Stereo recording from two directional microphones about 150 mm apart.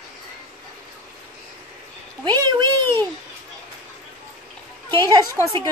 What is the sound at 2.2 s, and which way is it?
Speech, 25° right (ahead or behind).